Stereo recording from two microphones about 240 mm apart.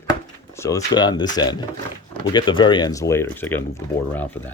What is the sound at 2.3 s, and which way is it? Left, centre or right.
Speech, centre.